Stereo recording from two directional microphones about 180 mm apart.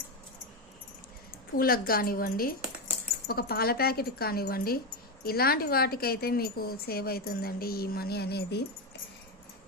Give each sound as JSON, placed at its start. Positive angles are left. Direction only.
{"t": 1.5, "sound": "a woman's voice", "side_deg": 55}